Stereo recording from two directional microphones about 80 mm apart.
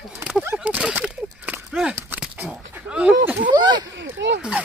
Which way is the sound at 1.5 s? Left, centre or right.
Right.